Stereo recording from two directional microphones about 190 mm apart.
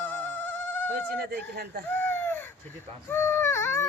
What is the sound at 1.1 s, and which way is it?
Speech, 55° right (ahead or behind).